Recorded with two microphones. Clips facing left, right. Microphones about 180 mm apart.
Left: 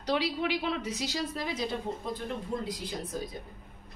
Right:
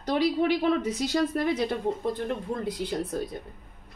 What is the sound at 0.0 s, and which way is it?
A woman's voice, 50° right (ahead or behind).